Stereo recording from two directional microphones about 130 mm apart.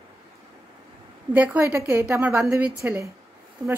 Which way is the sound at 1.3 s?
10° right (ahead or behind).